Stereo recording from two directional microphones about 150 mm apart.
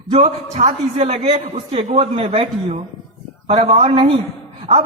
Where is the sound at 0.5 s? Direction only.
50° right (ahead or behind).